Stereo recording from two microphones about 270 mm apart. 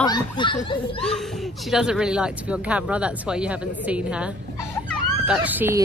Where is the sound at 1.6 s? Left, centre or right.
Centre.